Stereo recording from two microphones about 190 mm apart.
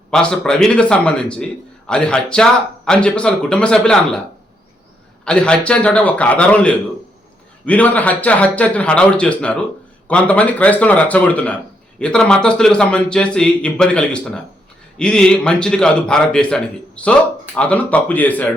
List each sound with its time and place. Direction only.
0.1 s a man's voice: 5° left (ahead or behind)
5.2 s a man's voice: 5° left (ahead or behind)